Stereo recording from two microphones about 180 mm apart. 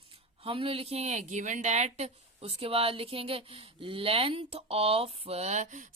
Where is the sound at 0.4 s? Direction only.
30° right (ahead or behind).